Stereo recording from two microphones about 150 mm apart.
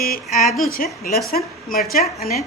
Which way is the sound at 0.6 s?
75° left (ahead or behind).